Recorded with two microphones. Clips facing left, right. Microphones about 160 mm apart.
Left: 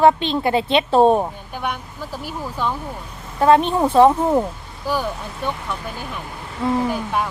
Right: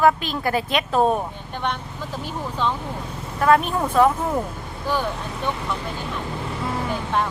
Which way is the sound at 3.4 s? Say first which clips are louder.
Left 4 dB; 30° left (ahead or behind).